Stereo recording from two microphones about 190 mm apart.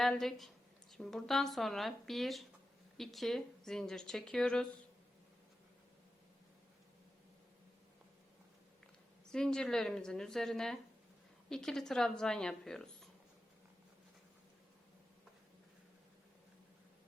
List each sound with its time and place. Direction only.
0.0 s a woman's voice: centre (ahead or behind)
9.3 s speech: 5° left (ahead or behind)